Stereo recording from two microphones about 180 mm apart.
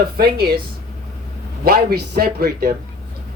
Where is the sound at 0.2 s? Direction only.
60° right (ahead or behind).